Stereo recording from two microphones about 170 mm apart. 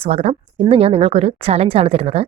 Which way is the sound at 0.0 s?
35° right (ahead or behind).